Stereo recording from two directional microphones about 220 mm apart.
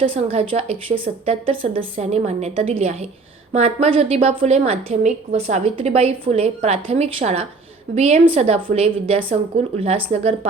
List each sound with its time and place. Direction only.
0.0 s a woman's voice: 25° right (ahead or behind)